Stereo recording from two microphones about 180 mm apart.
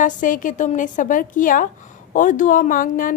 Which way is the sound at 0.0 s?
45° left (ahead or behind).